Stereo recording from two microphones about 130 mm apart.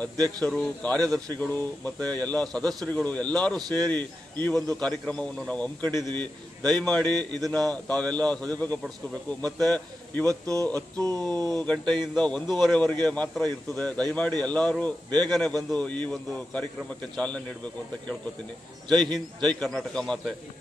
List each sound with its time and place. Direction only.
0.4 s a man's voice: 5° left (ahead or behind)
3.5 s a sound: 30° right (ahead or behind)
3.8 s a man's voice: 10° left (ahead or behind)
5.9 s a man's voice: 30° right (ahead or behind)
6.1 s a man's voice: 5° left (ahead or behind)
10.2 s a sound: 25° right (ahead or behind)
11.6 s a man's voice: 5° left (ahead or behind)
19.1 s a man's voice: 5° left (ahead or behind)